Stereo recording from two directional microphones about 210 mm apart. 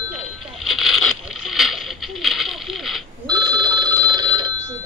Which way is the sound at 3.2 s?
20° right (ahead or behind).